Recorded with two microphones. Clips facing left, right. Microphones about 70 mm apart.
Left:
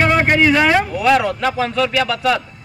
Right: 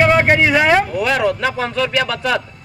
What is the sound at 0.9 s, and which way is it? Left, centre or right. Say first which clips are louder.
Speech: left 2 dB; centre.